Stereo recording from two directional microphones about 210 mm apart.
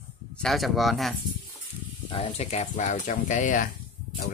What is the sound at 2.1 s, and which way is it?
Speech, 30° left (ahead or behind).